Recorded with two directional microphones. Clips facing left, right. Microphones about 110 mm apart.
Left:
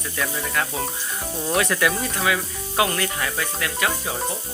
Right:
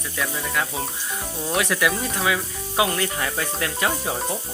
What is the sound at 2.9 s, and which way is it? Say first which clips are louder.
Speech: even; 25° right (ahead or behind).